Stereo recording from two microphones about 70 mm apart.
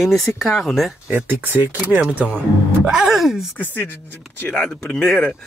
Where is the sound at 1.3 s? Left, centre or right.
Right.